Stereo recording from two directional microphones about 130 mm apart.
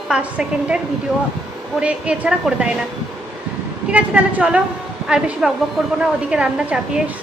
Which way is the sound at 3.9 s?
10° right (ahead or behind).